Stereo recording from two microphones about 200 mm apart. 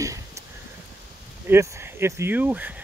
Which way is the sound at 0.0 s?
15° right (ahead or behind).